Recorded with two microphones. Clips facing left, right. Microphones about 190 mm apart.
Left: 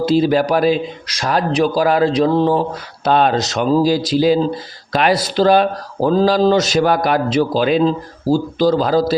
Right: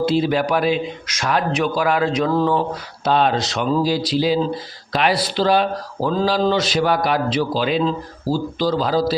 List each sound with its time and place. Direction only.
0.0 s a man's voice: 40° left (ahead or behind)
3.0 s speech: 55° left (ahead or behind)